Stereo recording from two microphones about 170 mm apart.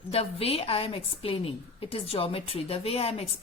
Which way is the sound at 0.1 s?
35° left (ahead or behind).